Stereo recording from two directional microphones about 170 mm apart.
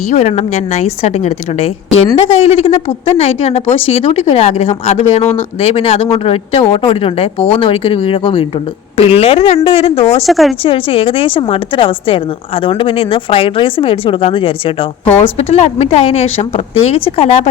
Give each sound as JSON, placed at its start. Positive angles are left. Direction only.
{"t": 0.1, "sound": "speech", "side_deg": 40}
{"t": 10.2, "sound": "speech", "side_deg": 0}
{"t": 10.6, "sound": "speech", "side_deg": 30}